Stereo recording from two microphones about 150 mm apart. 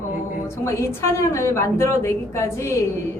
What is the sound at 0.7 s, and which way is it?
A woman's voice, 20° left (ahead or behind).